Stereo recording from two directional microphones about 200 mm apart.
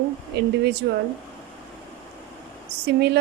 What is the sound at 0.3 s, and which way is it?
Speech, 55° right (ahead or behind).